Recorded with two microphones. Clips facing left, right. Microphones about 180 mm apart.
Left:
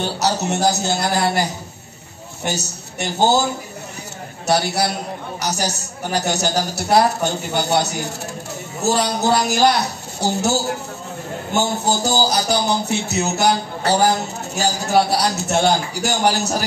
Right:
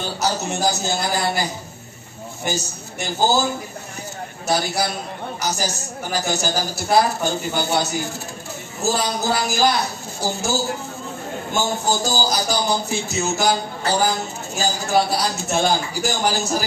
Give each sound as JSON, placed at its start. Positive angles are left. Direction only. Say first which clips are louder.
{"t": 0.0, "sound": "a woman's voice", "louder": "left 3 dB", "side_deg": 70}
{"t": 4.5, "sound": "a woman's voice", "louder": "left 3 dB", "side_deg": 70}
{"t": 11.5, "sound": "a woman's voice", "louder": "left 2 dB", "side_deg": 70}